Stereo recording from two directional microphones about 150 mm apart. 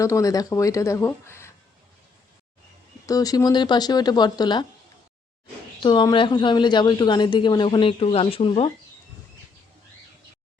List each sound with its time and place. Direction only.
0.0 s speech: 20° left (ahead or behind)
3.1 s speech: 25° left (ahead or behind)
5.8 s a woman's voice: 30° left (ahead or behind)